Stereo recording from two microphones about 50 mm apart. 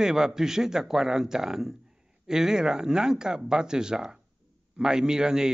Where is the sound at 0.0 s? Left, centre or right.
Centre.